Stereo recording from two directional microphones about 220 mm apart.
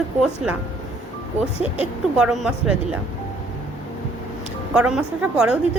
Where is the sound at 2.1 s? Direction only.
5° right (ahead or behind).